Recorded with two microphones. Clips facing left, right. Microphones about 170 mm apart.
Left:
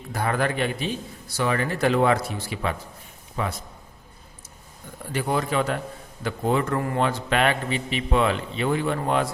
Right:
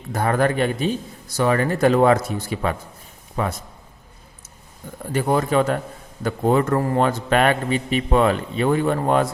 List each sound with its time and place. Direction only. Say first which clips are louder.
0.1 s a man's voice: right 5 dB; 45° right (ahead or behind)
5.1 s a man's voice: right 5 dB; 45° right (ahead or behind)